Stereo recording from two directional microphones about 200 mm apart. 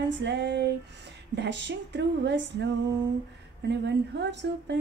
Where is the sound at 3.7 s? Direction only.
60° right (ahead or behind).